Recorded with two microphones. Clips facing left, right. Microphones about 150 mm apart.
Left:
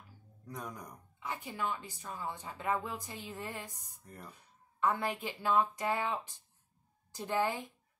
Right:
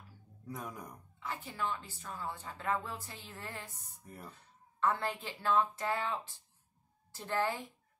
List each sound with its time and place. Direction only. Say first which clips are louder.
0.5 s speech: even; 5° right (ahead or behind)
1.2 s a woman's voice: left 1 dB; 15° left (ahead or behind)
4.0 s speech: right 1 dB; 5° right (ahead or behind)
4.3 s a woman's voice: right 1 dB; 15° left (ahead or behind)